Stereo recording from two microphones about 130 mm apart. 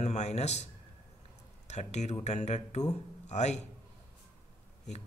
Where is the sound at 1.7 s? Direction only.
60° left (ahead or behind).